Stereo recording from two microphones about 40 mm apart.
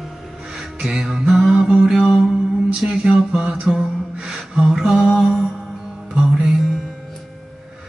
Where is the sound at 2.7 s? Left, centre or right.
Right.